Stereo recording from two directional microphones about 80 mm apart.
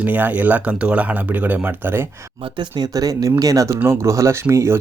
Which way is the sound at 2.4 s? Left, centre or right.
Right.